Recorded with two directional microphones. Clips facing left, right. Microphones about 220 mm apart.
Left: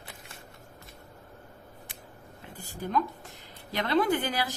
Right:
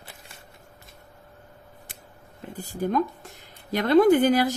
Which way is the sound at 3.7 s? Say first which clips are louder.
Right 9 dB; 45° right (ahead or behind).